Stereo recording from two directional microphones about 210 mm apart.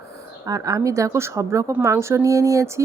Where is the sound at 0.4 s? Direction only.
15° right (ahead or behind).